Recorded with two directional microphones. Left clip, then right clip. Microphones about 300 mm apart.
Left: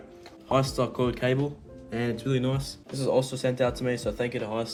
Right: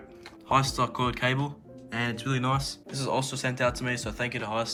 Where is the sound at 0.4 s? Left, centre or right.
Centre.